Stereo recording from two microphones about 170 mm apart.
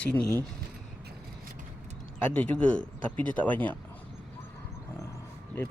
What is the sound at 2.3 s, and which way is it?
Speech, 10° left (ahead or behind).